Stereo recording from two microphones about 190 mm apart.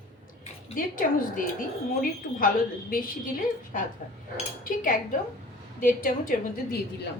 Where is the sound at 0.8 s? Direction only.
45° left (ahead or behind).